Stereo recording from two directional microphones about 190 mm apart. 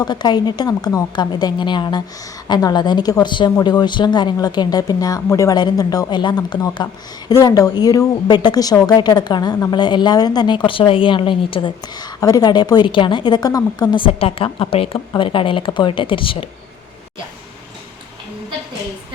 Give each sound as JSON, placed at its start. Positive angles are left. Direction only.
{"t": 0.0, "sound": "speech", "side_deg": 20}